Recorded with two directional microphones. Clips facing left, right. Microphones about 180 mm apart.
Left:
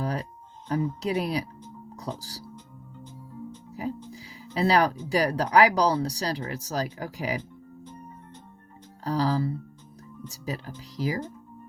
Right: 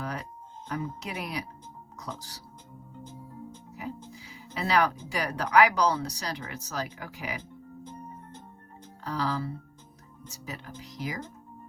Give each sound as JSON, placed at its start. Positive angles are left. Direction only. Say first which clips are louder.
{"t": 0.0, "sound": "music", "louder": "left 5 dB", "side_deg": 35}
{"t": 0.7, "sound": "speech", "louder": "left 8 dB", "side_deg": 35}
{"t": 3.8, "sound": "speech", "louder": "left 6 dB", "side_deg": 35}
{"t": 9.0, "sound": "speech", "louder": "left 5 dB", "side_deg": 35}